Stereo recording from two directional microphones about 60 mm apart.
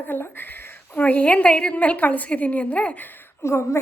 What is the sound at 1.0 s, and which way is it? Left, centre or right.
A woman's voice, left.